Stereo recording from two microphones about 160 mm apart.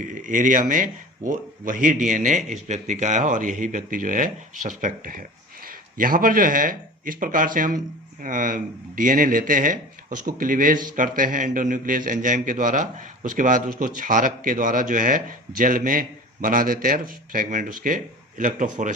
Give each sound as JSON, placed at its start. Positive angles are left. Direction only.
{"t": 0.0, "sound": "a man's voice", "side_deg": -55}